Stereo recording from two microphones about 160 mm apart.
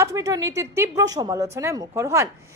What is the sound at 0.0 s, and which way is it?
A woman's voice, 20° right (ahead or behind).